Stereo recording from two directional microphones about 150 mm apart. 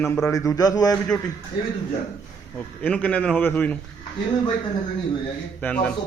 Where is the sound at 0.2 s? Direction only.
20° left (ahead or behind).